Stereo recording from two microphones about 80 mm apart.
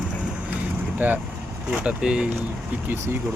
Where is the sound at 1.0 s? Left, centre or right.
Right.